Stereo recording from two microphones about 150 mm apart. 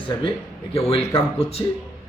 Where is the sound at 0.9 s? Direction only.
40° left (ahead or behind).